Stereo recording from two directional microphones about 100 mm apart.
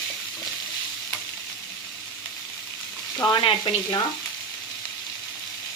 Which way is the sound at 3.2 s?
55° left (ahead or behind).